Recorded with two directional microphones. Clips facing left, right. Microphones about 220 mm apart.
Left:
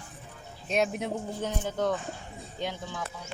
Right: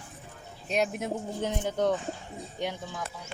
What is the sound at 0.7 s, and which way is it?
Speech, centre (ahead or behind).